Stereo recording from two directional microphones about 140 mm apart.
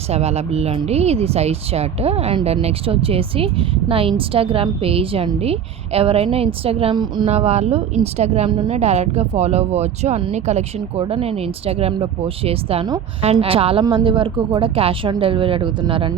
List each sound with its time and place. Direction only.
0.1 s speech: 50° right (ahead or behind); by 7.3 s 30° right (ahead or behind)
7.3 s speech: 50° right (ahead or behind)
8.4 s speech: 35° right (ahead or behind)
8.7 s speech: 50° right (ahead or behind)